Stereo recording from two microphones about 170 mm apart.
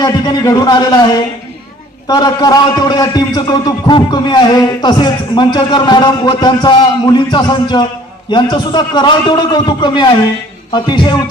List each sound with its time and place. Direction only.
0.0 s a man's voice: 25° left (ahead or behind)